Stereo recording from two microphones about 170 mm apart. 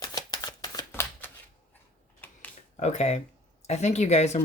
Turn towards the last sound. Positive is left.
turn(degrees=40)  # may be behind; listen again after turning